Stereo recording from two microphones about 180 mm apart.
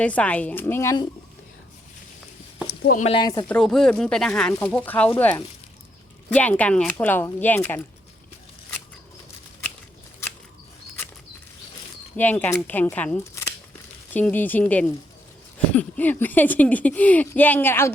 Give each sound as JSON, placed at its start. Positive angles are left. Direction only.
{"t": 0.0, "sound": "speech", "side_deg": 5}
{"t": 2.6, "sound": "a sound", "side_deg": 60}
{"t": 3.0, "sound": "speech", "side_deg": 30}
{"t": 3.5, "sound": "speech", "side_deg": 5}
{"t": 12.1, "sound": "speech", "side_deg": 10}